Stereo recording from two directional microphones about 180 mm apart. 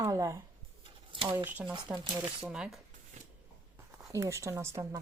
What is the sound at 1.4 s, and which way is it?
Speech, 10° right (ahead or behind).